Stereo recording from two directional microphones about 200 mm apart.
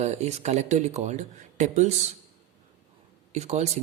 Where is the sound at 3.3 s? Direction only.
35° right (ahead or behind).